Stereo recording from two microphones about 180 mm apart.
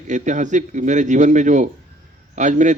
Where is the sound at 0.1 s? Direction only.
45° right (ahead or behind).